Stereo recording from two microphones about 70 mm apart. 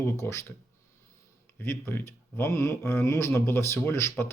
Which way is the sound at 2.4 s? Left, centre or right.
Left.